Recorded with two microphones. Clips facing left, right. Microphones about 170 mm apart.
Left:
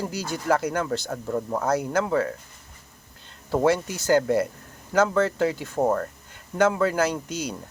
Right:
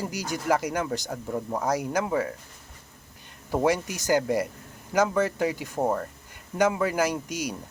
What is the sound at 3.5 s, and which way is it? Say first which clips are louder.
Speech: left 3 dB; 15° right (ahead or behind).